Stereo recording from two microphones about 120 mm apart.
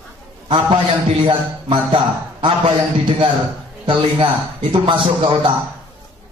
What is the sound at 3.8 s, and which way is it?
A man's voice, 45° right (ahead or behind).